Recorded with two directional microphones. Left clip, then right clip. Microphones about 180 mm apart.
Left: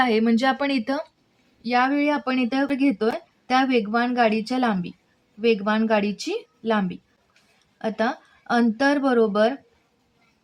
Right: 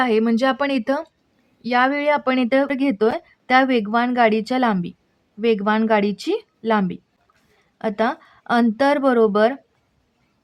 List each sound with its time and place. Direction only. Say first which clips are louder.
0.0 s speech: right 2 dB; 30° right (ahead or behind)